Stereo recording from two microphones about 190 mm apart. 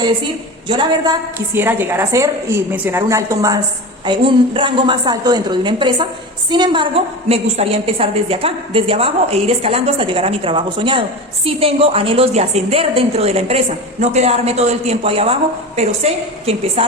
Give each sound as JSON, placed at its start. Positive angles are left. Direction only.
{"t": 1.5, "sound": "a woman's voice", "side_deg": -10}